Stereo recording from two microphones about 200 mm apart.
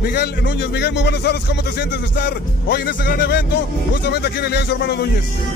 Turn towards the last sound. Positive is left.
turn(degrees=55)  # may be behind; listen again after turning